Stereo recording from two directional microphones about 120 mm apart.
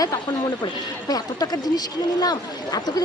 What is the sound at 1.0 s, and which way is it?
Speech, 30° left (ahead or behind).